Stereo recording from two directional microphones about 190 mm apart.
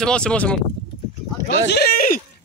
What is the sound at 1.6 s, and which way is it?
Speech, 55° left (ahead or behind).